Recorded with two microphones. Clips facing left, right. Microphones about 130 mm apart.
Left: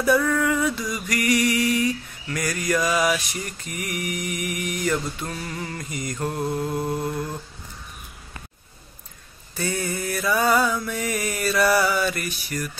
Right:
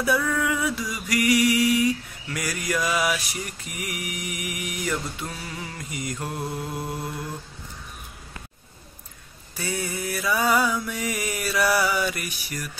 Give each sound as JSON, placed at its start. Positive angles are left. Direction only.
{"t": 0.0, "sound": "music", "side_deg": -5}
{"t": 2.3, "sound": "mantra", "side_deg": -5}
{"t": 9.6, "sound": "mantra", "side_deg": -10}